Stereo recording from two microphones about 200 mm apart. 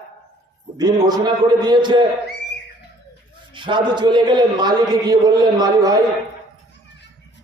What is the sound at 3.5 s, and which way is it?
A man's voice, 25° right (ahead or behind).